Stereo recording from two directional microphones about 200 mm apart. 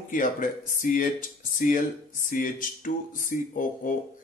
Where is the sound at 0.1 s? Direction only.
40° left (ahead or behind).